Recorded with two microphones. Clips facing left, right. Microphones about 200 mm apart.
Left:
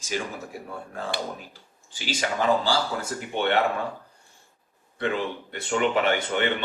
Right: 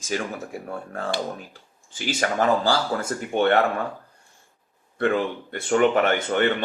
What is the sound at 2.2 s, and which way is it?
Speech, 50° right (ahead or behind).